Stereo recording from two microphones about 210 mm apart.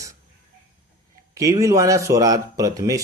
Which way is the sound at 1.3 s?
15° right (ahead or behind).